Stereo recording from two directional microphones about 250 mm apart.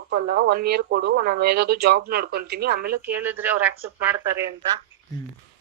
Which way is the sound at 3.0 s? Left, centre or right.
Centre.